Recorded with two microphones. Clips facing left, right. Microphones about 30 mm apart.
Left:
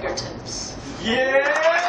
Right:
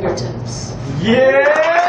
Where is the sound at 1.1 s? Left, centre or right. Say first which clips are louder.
Right 8 dB; right.